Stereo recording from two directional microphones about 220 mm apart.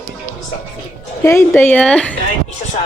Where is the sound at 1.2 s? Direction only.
10° left (ahead or behind).